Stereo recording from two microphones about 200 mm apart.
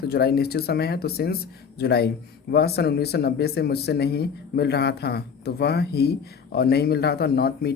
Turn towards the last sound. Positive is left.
turn(degrees=50)  # may be behind; listen again after turning